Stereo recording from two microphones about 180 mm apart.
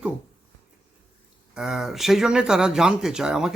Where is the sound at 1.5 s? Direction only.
5° right (ahead or behind).